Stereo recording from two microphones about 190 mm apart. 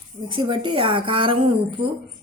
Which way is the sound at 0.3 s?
25° right (ahead or behind).